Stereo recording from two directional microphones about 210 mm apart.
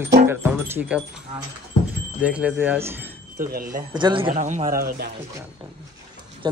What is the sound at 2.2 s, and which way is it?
Speech, 5° right (ahead or behind).